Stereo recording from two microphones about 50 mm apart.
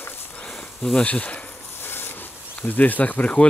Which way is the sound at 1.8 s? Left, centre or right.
Left.